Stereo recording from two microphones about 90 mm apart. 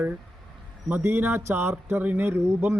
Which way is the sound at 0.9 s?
20° right (ahead or behind).